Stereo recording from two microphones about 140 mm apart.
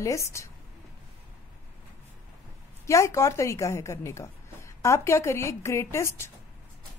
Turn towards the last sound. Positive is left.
turn(degrees=20)  # may be behind; listen again after turning